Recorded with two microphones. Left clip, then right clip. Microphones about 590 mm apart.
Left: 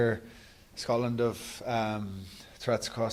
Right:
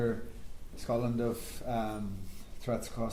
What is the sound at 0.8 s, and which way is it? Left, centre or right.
Speech, left.